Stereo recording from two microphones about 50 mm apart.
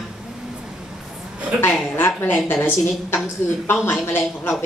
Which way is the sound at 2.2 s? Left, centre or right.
Left.